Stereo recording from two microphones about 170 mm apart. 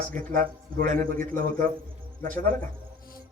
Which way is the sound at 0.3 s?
55° right (ahead or behind).